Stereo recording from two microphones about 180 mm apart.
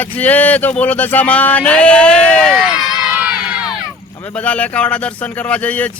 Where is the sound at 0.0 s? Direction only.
10° left (ahead or behind).